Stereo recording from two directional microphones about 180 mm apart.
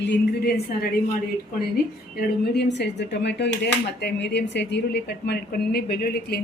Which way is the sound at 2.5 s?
70° left (ahead or behind).